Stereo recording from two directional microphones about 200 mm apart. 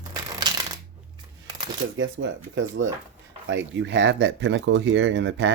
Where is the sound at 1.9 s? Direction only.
70° right (ahead or behind).